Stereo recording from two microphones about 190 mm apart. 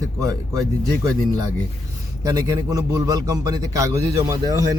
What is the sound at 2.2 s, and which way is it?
A man's voice, 20° right (ahead or behind).